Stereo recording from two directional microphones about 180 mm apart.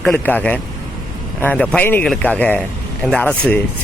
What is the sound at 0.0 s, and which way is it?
Speech, 10° left (ahead or behind).